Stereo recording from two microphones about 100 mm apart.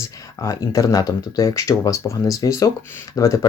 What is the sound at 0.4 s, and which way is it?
Speech, 35° left (ahead or behind).